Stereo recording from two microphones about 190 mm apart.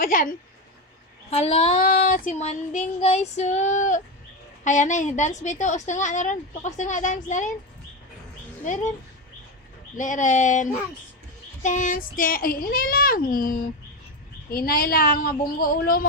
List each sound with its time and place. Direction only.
0.0 s speech: 45° left (ahead or behind)
1.3 s a woman's voice: 35° left (ahead or behind)
1.8 s a woman's voice: 45° left (ahead or behind)
8.6 s a woman's voice: 40° left (ahead or behind)
10.0 s a woman's voice: 40° left (ahead or behind)